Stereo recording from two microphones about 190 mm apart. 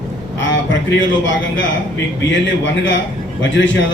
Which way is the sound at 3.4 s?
75° left (ahead or behind).